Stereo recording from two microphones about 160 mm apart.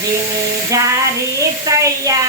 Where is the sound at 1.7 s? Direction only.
20° right (ahead or behind).